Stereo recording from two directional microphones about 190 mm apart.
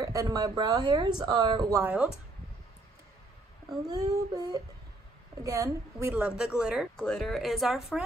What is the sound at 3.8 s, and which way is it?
A woman's voice, 20° right (ahead or behind).